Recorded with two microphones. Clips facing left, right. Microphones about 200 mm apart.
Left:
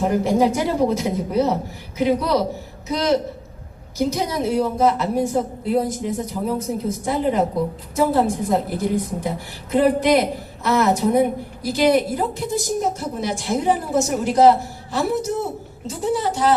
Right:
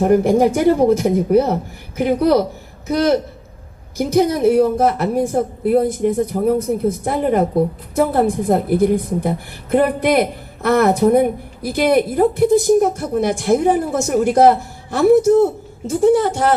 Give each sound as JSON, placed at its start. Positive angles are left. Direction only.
{"t": 0.0, "sound": "a woman's voice", "side_deg": -55}